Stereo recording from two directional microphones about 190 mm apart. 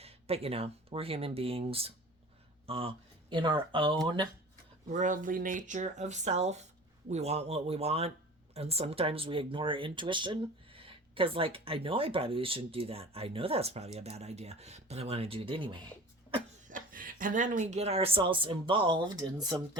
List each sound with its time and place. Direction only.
0.0 s speech: 30° right (ahead or behind)
4.9 s speech: 40° right (ahead or behind)
16.6 s speech: 45° right (ahead or behind); by 19.8 s 20° right (ahead or behind)